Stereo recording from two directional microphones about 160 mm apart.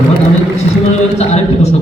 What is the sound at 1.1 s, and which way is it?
Speech, 45° left (ahead or behind).